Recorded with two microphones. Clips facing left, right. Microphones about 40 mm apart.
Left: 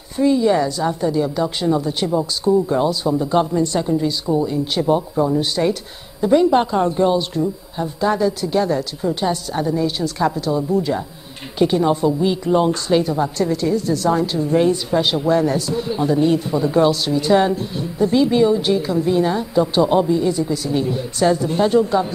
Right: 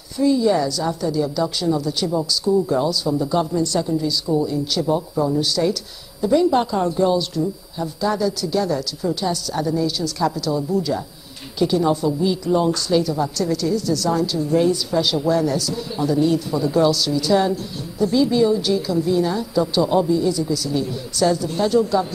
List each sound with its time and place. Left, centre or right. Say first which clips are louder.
0.2 s speech: left 2 dB; left